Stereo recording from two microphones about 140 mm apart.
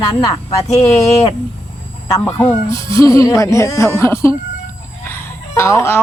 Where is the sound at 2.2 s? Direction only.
15° left (ahead or behind).